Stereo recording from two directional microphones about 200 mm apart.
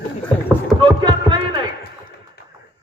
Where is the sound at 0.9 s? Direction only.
20° right (ahead or behind).